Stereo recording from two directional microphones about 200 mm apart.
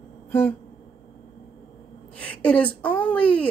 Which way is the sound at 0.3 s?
10° left (ahead or behind).